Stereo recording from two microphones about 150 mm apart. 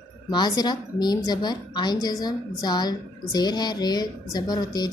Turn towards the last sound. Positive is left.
turn(degrees=25)  # may be behind; listen again after turning